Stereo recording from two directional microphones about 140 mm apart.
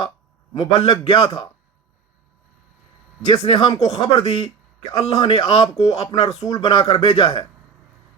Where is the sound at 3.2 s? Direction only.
30° left (ahead or behind).